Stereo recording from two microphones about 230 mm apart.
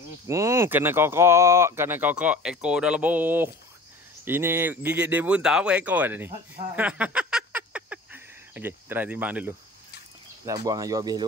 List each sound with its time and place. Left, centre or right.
0.3 s speech: centre